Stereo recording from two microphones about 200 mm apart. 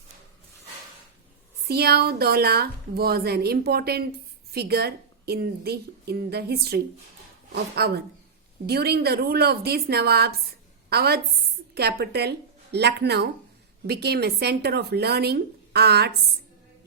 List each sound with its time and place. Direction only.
1.6 s a woman's voice: 50° right (ahead or behind)